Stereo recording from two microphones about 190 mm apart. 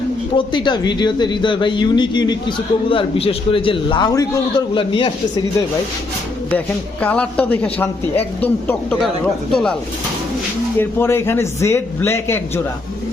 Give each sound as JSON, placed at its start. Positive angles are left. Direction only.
{"t": 0.3, "sound": "a man's voice", "side_deg": 25}
{"t": 7.0, "sound": "speech", "side_deg": 5}
{"t": 10.8, "sound": "speech", "side_deg": 10}